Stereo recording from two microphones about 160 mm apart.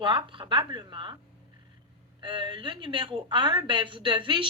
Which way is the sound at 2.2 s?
30° right (ahead or behind).